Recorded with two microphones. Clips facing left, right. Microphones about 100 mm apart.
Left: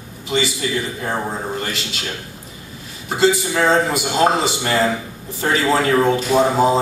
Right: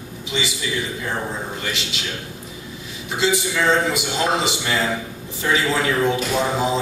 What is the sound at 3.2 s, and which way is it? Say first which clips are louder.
A man's voice: left 4 dB; 45° left (ahead or behind).